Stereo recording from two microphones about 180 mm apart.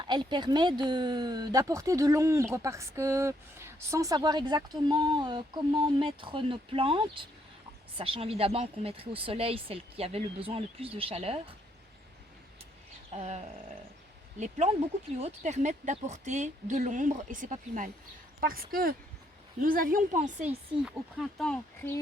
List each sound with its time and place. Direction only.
0.0 s speech: 25° right (ahead or behind)
13.1 s a woman's voice: 40° right (ahead or behind)
20.8 s speech: centre (ahead or behind)